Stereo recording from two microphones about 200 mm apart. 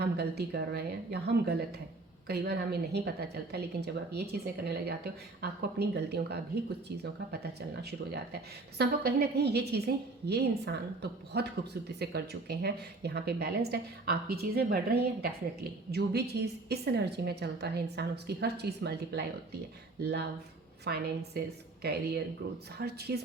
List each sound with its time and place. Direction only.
0.0 s a woman's voice: 55° right (ahead or behind)
7.8 s a woman's voice: 55° right (ahead or behind)